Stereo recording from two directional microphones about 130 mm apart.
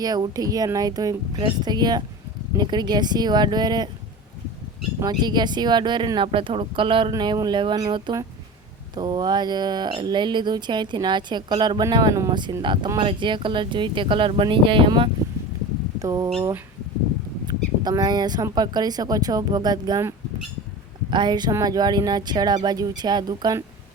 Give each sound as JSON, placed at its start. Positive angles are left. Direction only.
{"t": 0.0, "sound": "speech", "side_deg": -30}
{"t": 4.9, "sound": "speech", "side_deg": -30}
{"t": 16.0, "sound": "speech", "side_deg": -30}
{"t": 17.5, "sound": "speech", "side_deg": -35}